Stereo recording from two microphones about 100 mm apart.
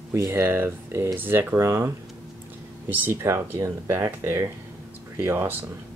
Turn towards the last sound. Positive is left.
turn(degrees=-20)  # may be behind; listen again after turning